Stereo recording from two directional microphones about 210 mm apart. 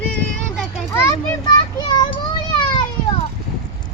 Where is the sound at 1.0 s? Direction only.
20° left (ahead or behind).